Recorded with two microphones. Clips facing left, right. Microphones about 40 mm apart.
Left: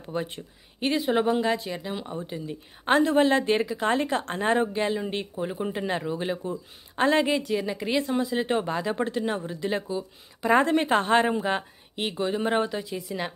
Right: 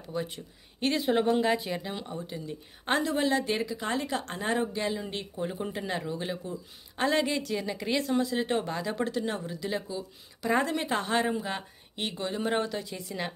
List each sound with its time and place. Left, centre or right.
0.0 s speech: left
0.7 s speech: centre
2.2 s speech: left
3.0 s speech: left
7.2 s speech: centre
9.4 s speech: left
11.9 s speech: centre
12.8 s speech: centre